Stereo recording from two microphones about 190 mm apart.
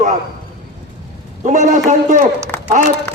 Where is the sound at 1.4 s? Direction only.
40° right (ahead or behind).